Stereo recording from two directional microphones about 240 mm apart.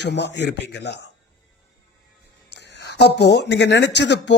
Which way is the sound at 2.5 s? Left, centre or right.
Left.